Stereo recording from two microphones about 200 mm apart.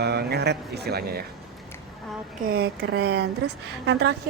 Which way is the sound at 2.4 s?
50° right (ahead or behind).